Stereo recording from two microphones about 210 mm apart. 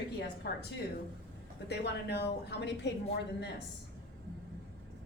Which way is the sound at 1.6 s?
50° left (ahead or behind).